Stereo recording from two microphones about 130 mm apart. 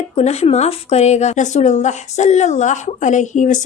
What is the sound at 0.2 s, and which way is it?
A woman's voice, 50° left (ahead or behind).